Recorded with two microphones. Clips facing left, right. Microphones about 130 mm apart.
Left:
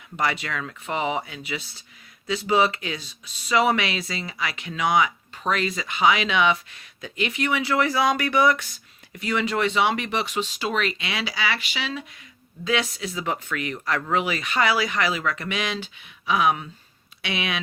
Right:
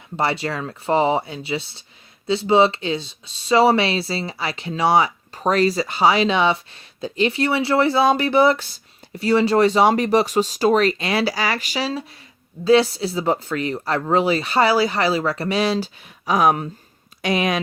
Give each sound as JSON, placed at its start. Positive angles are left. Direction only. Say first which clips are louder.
{"t": 0.2, "sound": "speech", "louder": "right 4 dB", "side_deg": -30}